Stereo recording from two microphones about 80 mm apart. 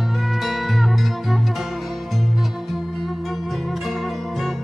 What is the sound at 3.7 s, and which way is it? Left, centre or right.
Zither, centre.